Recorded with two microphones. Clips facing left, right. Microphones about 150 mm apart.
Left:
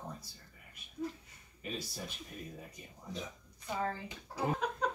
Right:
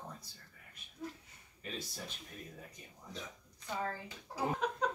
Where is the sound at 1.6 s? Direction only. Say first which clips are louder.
Left 3 dB; 10° left (ahead or behind).